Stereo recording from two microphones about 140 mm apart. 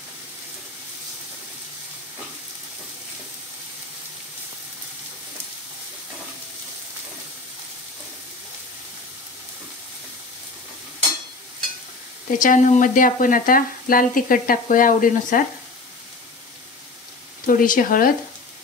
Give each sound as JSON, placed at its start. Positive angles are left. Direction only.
{"t": 12.3, "sound": "speech", "side_deg": 70}
{"t": 17.5, "sound": "speech", "side_deg": 75}